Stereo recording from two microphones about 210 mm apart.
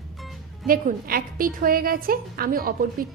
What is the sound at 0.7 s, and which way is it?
A woman's voice, 40° right (ahead or behind).